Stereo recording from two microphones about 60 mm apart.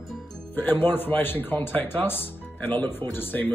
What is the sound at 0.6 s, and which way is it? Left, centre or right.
Speech, left.